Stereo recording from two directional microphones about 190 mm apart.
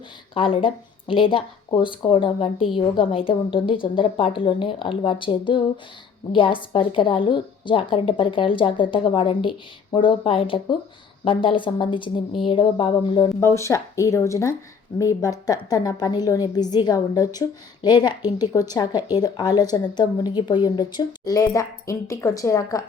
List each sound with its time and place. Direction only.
0.3 s a woman's voice: 30° left (ahead or behind)
13.5 s a woman's voice: 15° left (ahead or behind)